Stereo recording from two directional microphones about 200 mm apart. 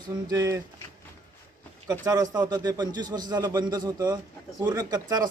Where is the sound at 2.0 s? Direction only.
20° right (ahead or behind).